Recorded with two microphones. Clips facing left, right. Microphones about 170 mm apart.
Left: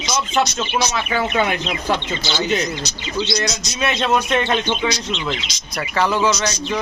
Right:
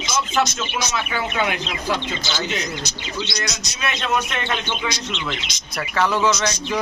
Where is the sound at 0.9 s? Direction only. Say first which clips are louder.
Left 4 dB; 45° left (ahead or behind).